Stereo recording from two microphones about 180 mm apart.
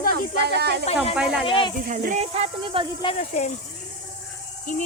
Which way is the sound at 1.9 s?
40° right (ahead or behind).